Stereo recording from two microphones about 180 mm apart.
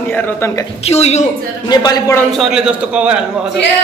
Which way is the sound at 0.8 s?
35° left (ahead or behind).